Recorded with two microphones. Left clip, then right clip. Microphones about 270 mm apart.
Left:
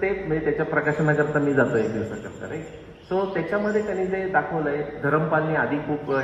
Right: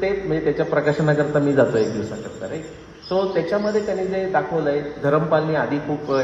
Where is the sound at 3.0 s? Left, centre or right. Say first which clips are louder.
Right 4 dB; right.